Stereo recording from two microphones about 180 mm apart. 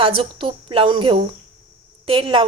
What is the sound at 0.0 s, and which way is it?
A woman's voice, 30° right (ahead or behind).